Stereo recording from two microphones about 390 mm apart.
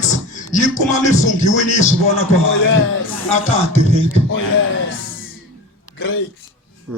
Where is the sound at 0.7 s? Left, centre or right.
Centre.